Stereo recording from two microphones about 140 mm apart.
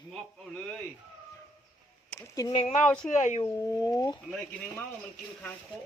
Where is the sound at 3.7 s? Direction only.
25° left (ahead or behind).